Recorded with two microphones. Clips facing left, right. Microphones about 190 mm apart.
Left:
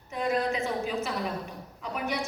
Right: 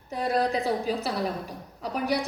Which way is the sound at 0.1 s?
35° right (ahead or behind).